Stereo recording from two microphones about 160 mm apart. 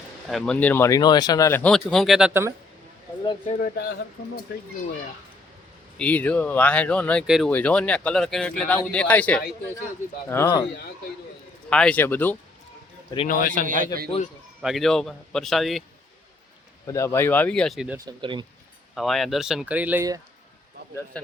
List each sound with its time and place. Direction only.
0.3 s speech: 5° left (ahead or behind)
3.6 s speech: 70° left (ahead or behind)
6.0 s speech: 10° left (ahead or behind)
11.7 s speech: 5° left (ahead or behind)
13.2 s a man's voice: 55° left (ahead or behind)
13.7 s a man's voice: 55° right (ahead or behind)
14.6 s speech: centre (ahead or behind)
16.8 s speech: 20° left (ahead or behind); by 17.9 s centre (ahead or behind)
17.9 s speech: 30° right (ahead or behind)
18.9 s speech: centre (ahead or behind)